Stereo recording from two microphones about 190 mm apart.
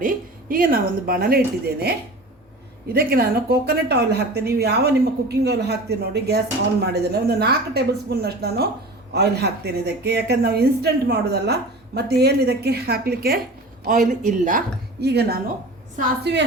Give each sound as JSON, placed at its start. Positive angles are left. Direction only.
{"t": 0.0, "sound": "a woman's voice", "side_deg": -45}
{"t": 2.9, "sound": "a woman's voice", "side_deg": -55}
{"t": 15.0, "sound": "a woman's voice", "side_deg": -60}